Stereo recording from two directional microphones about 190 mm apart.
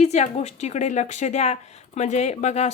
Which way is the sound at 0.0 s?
35° left (ahead or behind).